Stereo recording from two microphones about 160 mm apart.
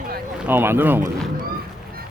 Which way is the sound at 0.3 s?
10° right (ahead or behind).